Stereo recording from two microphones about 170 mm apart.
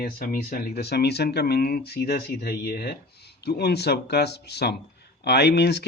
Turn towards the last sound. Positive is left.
turn(degrees=80)